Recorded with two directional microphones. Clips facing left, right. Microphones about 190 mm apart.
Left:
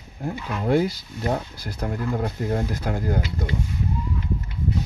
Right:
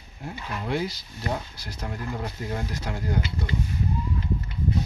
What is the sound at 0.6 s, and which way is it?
Speech, 50° left (ahead or behind).